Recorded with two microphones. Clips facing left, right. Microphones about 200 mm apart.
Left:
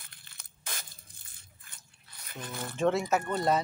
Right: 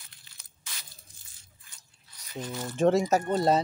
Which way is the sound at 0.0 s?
55° left (ahead or behind).